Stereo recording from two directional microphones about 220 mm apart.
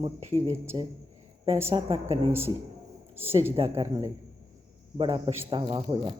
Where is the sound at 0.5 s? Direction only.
10° right (ahead or behind).